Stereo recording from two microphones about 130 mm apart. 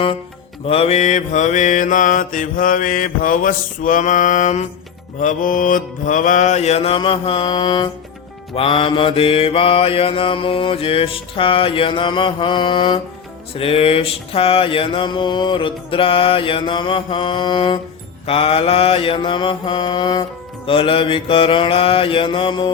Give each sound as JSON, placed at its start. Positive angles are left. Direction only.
{"t": 0.6, "sound": "mantra", "side_deg": 50}
{"t": 5.2, "sound": "mantra", "side_deg": 80}